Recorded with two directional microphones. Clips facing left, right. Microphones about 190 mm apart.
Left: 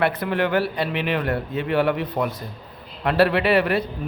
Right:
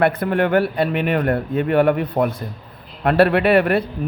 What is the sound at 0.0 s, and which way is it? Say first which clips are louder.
A man's voice: right 4 dB; 50° right (ahead or behind).